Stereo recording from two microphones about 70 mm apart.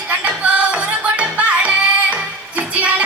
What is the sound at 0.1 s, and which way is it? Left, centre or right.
Music, centre.